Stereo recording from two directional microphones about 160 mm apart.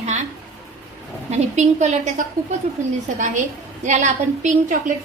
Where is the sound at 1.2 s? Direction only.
45° right (ahead or behind).